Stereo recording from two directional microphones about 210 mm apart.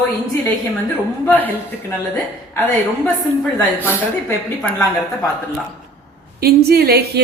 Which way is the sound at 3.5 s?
10° left (ahead or behind).